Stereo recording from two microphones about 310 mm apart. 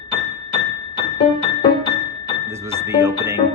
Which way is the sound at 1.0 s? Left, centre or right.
Centre.